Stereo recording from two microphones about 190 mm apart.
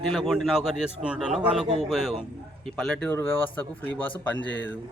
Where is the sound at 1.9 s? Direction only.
Centre (ahead or behind).